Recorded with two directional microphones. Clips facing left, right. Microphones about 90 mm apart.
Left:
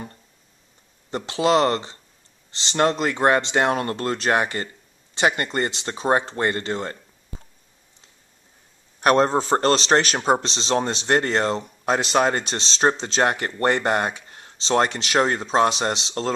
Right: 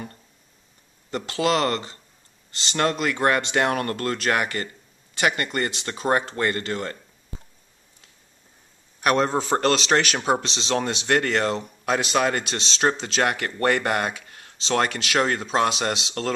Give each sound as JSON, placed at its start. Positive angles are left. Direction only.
{"t": 1.1, "sound": "speech", "side_deg": 25}
{"t": 9.0, "sound": "speech", "side_deg": 35}